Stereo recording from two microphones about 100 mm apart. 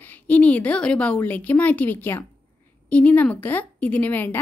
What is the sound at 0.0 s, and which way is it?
A woman's voice, 15° left (ahead or behind).